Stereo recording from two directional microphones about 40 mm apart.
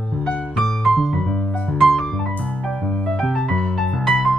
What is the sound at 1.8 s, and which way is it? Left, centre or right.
Piano, centre.